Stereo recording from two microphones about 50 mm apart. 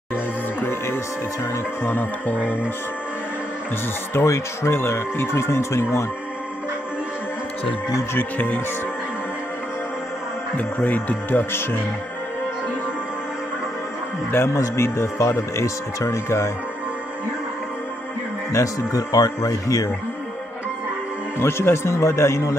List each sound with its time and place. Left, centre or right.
0.6 s music: left
4.1 s speech: left
8.1 s music: left
10.8 s speech: left
14.3 s speech: left
18.5 s speech: left
21.4 s speech: left